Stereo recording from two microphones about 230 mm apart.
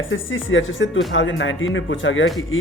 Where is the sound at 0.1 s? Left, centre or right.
Left.